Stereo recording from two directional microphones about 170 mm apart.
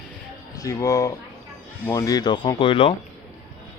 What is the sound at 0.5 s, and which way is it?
Speech, 20° left (ahead or behind).